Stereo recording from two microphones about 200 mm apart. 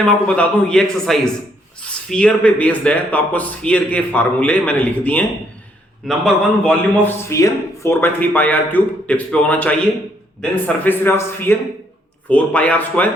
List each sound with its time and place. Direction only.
0.0 s a man's voice: 5° left (ahead or behind)